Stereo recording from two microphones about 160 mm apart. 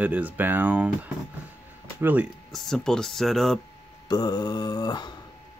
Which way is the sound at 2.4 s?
Centre (ahead or behind).